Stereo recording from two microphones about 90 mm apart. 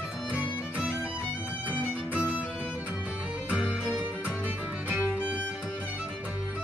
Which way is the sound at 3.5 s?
15° right (ahead or behind).